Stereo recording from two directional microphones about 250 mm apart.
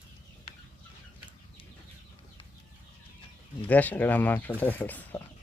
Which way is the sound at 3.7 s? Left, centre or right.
Centre.